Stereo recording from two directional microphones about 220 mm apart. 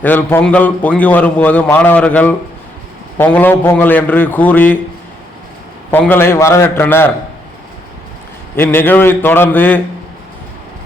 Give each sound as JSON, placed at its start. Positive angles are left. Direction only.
{"t": 0.0, "sound": "a man's voice", "side_deg": 10}
{"t": 5.9, "sound": "a man's voice", "side_deg": 10}
{"t": 8.5, "sound": "a man's voice", "side_deg": 10}